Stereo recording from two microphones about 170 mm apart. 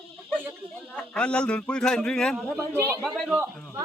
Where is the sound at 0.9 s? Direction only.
5° left (ahead or behind).